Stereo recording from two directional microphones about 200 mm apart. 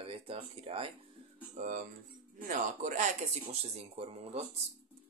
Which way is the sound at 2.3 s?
40° right (ahead or behind).